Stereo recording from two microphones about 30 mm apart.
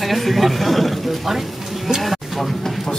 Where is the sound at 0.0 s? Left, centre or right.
Centre.